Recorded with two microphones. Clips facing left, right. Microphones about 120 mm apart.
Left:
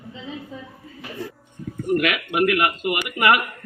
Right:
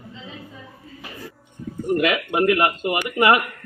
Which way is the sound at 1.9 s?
25° right (ahead or behind).